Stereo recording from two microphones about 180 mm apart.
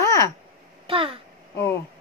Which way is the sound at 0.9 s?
30° right (ahead or behind).